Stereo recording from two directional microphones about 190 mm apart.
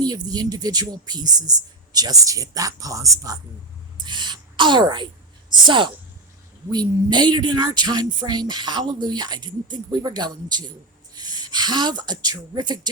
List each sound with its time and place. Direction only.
0.0 s speech: 20° right (ahead or behind)